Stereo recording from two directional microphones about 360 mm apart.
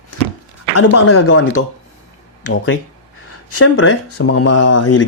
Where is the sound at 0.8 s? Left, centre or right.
Left.